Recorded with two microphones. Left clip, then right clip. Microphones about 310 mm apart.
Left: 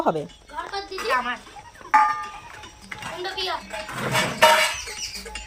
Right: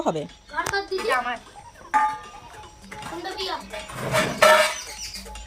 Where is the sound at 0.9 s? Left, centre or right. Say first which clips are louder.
Right 3 dB; left.